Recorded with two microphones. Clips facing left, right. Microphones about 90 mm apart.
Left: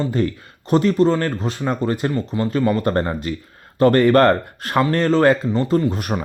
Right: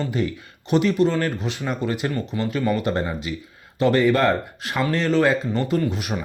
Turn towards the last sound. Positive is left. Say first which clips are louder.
# left 4 dB
turn(degrees=40)  # may be behind; listen again after turning